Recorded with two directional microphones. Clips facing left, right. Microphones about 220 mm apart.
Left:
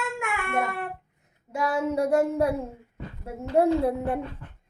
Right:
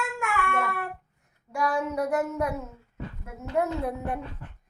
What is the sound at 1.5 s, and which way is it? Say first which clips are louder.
A child's voice: left 2 dB; 25° left (ahead or behind).